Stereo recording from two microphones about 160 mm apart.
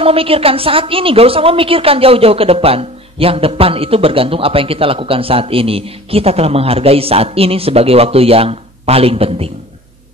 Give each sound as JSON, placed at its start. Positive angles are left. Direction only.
{"t": 0.0, "sound": "a woman's voice", "side_deg": -35}